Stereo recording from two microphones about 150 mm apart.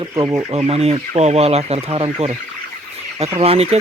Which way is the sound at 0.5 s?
40° right (ahead or behind).